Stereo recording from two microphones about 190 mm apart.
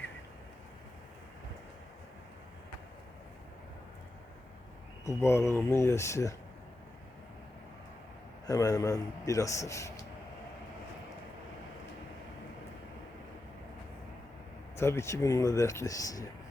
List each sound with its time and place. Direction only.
5.0 s a man's voice: 15° left (ahead or behind)
8.4 s a man's voice: 20° left (ahead or behind)
14.8 s a man's voice: 15° left (ahead or behind)